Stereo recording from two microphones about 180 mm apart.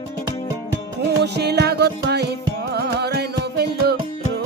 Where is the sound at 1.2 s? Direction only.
65° right (ahead or behind).